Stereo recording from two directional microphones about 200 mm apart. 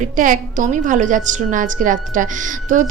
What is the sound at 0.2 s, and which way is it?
A woman's voice, 40° right (ahead or behind).